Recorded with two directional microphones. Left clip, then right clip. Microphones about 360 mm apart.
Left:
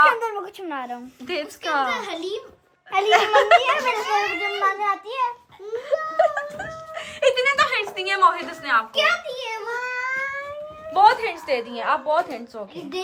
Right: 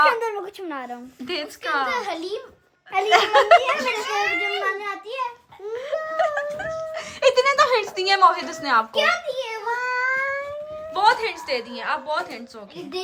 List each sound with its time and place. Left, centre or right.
0.0 s a woman's voice: centre
1.9 s a child's voice: centre
2.9 s speech: centre
5.7 s wail: centre
9.4 s cat: right
10.9 s speech: centre